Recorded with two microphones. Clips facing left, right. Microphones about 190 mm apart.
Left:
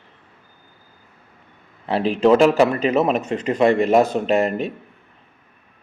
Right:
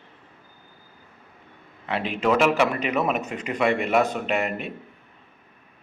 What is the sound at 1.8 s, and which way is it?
Speech, 35° left (ahead or behind).